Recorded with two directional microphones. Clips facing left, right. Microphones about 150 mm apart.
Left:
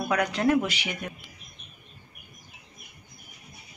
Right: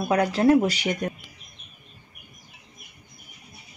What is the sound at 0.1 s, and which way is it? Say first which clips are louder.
Speech: right 5 dB; 30° right (ahead or behind).